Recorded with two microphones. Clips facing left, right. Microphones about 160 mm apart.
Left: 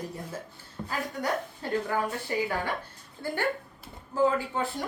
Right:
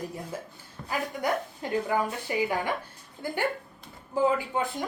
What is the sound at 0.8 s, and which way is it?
Speech, 15° right (ahead or behind).